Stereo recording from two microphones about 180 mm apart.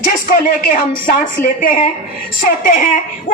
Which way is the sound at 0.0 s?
50° left (ahead or behind).